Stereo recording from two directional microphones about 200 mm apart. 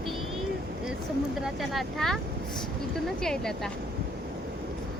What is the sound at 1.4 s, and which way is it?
Speech, centre (ahead or behind).